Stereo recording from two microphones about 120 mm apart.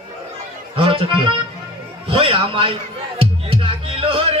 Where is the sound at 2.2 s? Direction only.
50° right (ahead or behind).